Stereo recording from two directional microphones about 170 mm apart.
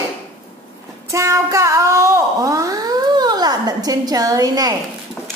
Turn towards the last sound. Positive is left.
turn(degrees=-20)  # may be behind; listen again after turning